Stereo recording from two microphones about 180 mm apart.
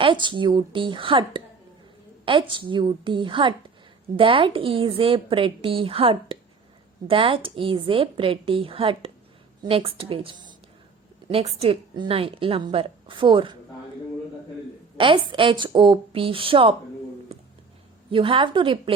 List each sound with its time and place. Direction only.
0.0 s a woman's voice: 25° right (ahead or behind)
14.9 s a woman's voice: 30° right (ahead or behind)
18.1 s a woman's voice: 30° right (ahead or behind)